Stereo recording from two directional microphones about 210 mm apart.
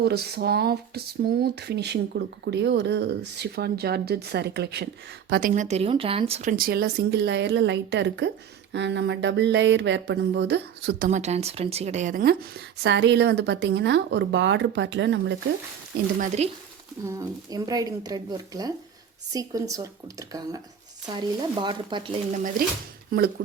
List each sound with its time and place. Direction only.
0.0 s speech: 50° right (ahead or behind)
5.3 s speech: 40° right (ahead or behind); by 8.3 s 60° right (ahead or behind)
8.7 s a sound: 55° right (ahead or behind)
11.1 s speech: 30° right (ahead or behind); by 15.4 s 55° right (ahead or behind)
16.2 s speech: 35° right (ahead or behind)
17.1 s speech: 15° right (ahead or behind)
22.3 s speech: 40° right (ahead or behind)